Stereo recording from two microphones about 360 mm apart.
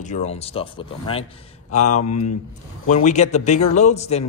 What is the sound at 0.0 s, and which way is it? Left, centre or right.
A man's voice, centre.